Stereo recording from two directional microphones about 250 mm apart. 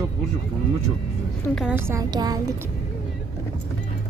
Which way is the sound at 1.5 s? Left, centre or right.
Centre.